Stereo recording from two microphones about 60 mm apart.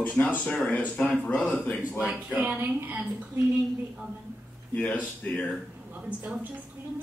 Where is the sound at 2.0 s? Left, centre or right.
Right.